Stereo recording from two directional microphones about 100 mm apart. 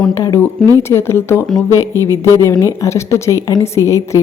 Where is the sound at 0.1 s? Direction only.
30° left (ahead or behind).